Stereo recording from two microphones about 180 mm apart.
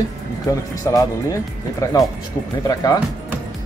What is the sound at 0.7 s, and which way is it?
Speech, 20° left (ahead or behind).